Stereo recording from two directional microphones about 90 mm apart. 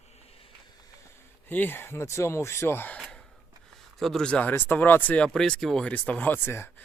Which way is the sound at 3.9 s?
5° left (ahead or behind).